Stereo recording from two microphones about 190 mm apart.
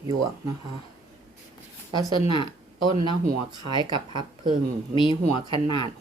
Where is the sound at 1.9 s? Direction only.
20° right (ahead or behind).